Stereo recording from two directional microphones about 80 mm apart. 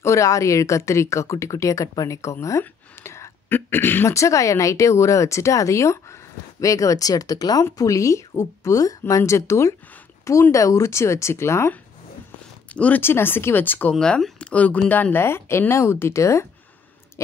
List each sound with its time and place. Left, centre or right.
0.0 s speech: left
2.6 s a sound: left
4.1 s speech: left
12.6 s speech: centre
13.0 s speech: left
13.9 s speech: centre; by 16.4 s left